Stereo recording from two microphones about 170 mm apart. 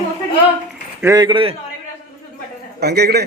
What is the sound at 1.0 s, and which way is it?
Speech, 25° right (ahead or behind).